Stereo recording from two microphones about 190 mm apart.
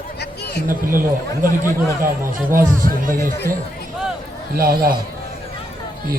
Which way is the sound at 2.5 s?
45° right (ahead or behind).